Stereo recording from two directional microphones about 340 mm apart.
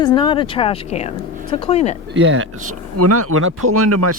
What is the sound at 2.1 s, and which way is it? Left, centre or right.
Speech, right.